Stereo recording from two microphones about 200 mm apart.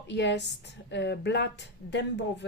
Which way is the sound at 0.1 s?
60° left (ahead or behind).